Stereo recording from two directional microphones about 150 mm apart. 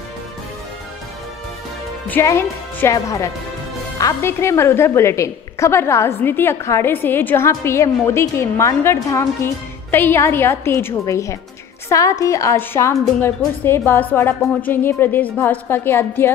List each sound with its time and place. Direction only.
2.0 s a woman's voice: 15° left (ahead or behind)